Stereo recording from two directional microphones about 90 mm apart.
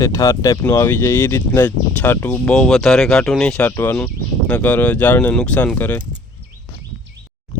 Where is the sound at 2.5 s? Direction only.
5° left (ahead or behind).